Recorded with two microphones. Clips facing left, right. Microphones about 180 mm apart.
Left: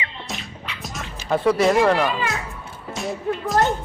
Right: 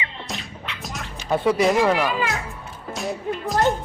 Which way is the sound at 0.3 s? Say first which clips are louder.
Even; centre (ahead or behind).